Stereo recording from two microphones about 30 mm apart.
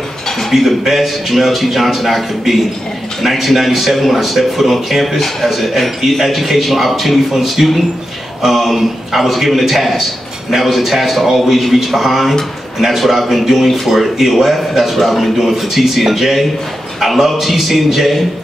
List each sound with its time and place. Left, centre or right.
0.5 s a man's voice: centre